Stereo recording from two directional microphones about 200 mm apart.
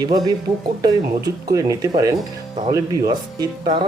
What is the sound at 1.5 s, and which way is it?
Speech, 15° right (ahead or behind).